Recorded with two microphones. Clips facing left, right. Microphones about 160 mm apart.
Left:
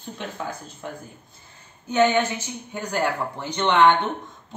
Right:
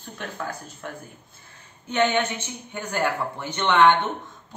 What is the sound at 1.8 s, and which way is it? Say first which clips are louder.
A woman's voice: left 3 dB; 10° left (ahead or behind).